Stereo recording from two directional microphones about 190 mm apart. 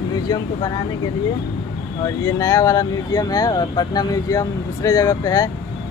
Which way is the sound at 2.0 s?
15° left (ahead or behind).